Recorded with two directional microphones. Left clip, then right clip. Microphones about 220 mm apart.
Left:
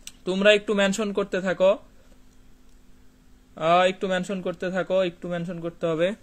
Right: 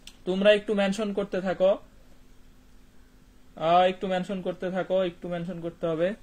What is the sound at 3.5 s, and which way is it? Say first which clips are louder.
Speech: left 2 dB; 40° left (ahead or behind).